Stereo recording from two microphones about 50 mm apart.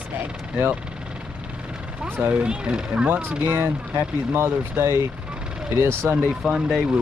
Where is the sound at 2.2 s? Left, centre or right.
Right.